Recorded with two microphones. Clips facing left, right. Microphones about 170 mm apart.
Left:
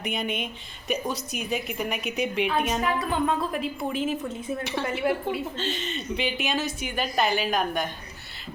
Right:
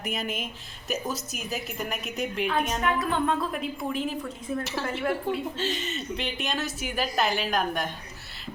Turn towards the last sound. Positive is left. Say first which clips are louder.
# left 1 dB
turn(degrees=0)  # may be behind; listen again after turning